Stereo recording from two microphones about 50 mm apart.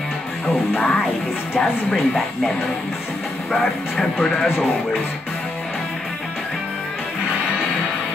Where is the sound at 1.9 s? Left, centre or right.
Centre.